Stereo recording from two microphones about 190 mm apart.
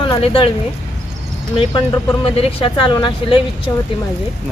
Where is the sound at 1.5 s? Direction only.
25° left (ahead or behind).